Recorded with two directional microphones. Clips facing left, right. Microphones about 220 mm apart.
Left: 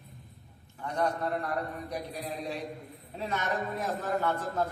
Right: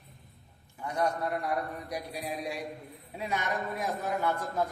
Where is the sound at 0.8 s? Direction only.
10° right (ahead or behind).